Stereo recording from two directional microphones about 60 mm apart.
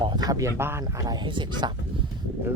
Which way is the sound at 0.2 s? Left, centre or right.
Right.